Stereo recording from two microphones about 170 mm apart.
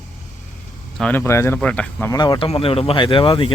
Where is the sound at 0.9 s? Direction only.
10° left (ahead or behind).